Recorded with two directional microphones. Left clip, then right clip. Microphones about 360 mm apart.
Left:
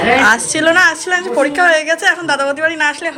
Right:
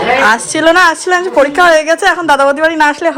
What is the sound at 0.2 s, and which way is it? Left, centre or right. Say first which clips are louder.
A woman's voice: right 2 dB; centre.